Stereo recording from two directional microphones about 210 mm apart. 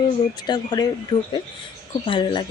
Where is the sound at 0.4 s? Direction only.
20° left (ahead or behind).